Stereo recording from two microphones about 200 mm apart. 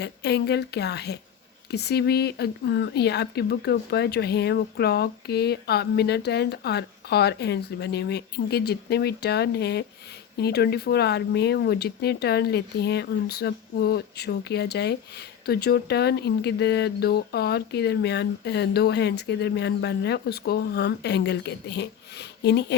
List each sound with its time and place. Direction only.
0.0 s speech: 55° left (ahead or behind)